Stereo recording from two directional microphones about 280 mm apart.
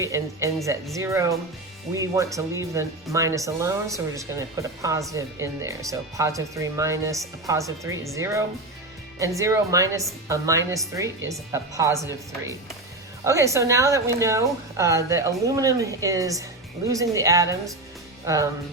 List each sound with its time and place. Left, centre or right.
0.0 s speech: centre
13.2 s speech: centre